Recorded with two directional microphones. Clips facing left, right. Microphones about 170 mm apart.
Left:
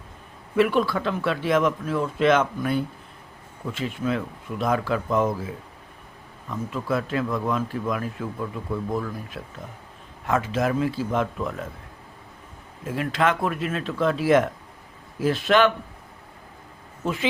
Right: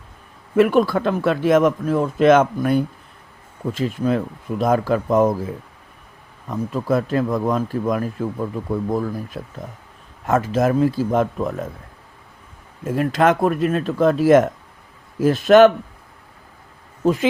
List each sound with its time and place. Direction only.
0.5 s speech: 45° right (ahead or behind)
6.5 s speech: 40° right (ahead or behind)
12.8 s speech: 45° right (ahead or behind)
17.0 s speech: 40° right (ahead or behind)